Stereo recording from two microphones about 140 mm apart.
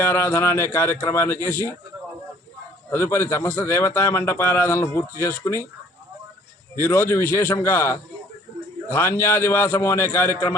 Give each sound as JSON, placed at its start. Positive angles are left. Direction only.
{"t": 0.0, "sound": "a man's voice", "side_deg": 15}
{"t": 2.9, "sound": "a man's voice", "side_deg": 20}
{"t": 6.8, "sound": "a man's voice", "side_deg": 15}